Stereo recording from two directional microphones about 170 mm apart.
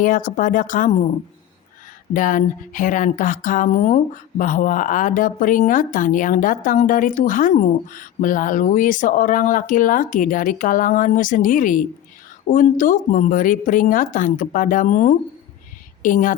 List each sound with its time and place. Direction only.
0.0 s speech: 50° left (ahead or behind)
2.1 s speech: 50° left (ahead or behind)